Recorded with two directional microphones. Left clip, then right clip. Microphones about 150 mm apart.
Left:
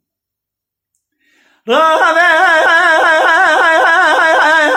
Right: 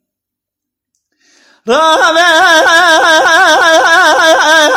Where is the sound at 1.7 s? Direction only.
50° right (ahead or behind).